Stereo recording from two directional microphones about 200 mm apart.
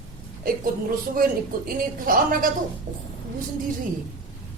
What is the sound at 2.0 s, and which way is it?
Speech, 45° right (ahead or behind).